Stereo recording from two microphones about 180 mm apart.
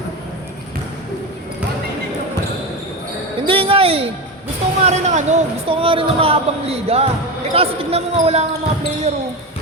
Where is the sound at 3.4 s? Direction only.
30° right (ahead or behind).